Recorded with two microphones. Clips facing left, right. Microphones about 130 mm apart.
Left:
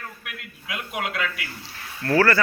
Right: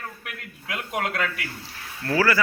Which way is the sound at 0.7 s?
40° right (ahead or behind).